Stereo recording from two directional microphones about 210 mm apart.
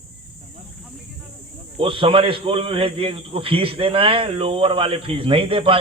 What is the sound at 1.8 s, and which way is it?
A man's voice, 25° right (ahead or behind).